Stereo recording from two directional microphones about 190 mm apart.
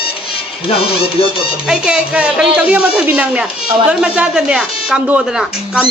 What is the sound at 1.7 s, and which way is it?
Speech, 5° right (ahead or behind).